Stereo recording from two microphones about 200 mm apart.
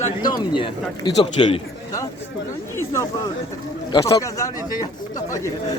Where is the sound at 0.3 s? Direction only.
25° left (ahead or behind).